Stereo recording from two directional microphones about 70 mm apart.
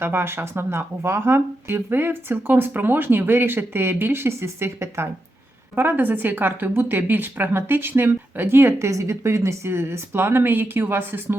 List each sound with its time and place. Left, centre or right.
0.0 s speech: right
5.7 s speech: right
8.9 s speech: right